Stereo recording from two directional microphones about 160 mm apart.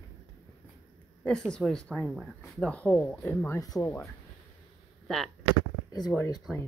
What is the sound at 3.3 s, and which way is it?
Speech, 15° left (ahead or behind).